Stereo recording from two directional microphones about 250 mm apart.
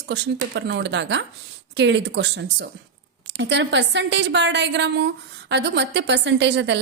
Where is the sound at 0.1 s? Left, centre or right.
Right.